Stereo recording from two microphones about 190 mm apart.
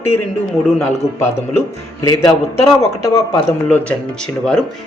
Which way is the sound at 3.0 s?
20° left (ahead or behind).